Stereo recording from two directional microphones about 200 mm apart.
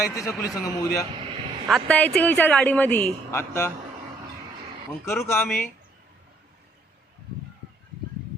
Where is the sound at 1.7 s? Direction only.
5° left (ahead or behind).